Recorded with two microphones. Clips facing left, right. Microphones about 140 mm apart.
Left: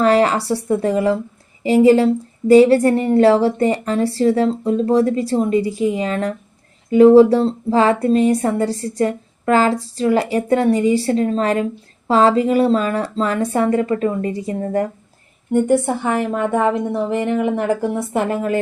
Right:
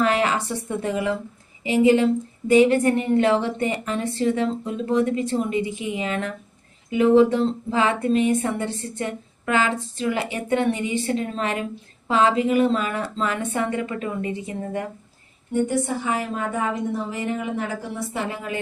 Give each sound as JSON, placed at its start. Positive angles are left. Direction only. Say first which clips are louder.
{"t": 0.0, "sound": "speech", "louder": "left 7 dB", "side_deg": 35}
{"t": 15.5, "sound": "a woman's voice", "louder": "left 7 dB", "side_deg": 55}